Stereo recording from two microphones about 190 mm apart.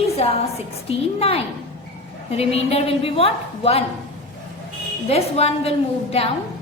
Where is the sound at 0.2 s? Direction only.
35° left (ahead or behind).